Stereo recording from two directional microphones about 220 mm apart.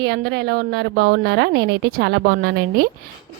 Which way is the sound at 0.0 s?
50° right (ahead or behind).